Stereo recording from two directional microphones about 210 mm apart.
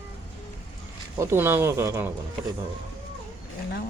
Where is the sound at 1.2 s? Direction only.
10° right (ahead or behind).